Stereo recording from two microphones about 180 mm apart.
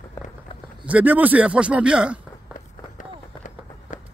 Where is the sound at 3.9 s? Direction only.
45° left (ahead or behind).